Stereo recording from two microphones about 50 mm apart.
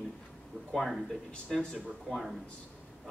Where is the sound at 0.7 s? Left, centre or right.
Centre.